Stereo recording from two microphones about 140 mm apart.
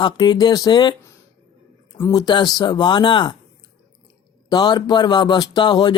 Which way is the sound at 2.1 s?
30° left (ahead or behind).